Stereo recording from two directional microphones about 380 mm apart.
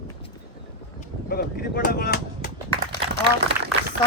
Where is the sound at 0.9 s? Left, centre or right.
Left.